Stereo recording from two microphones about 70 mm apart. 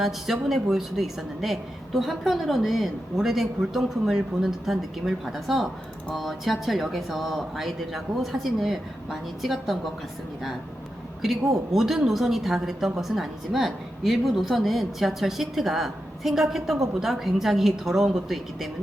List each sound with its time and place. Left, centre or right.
0.0 s a woman's voice: centre
11.7 s a woman's voice: centre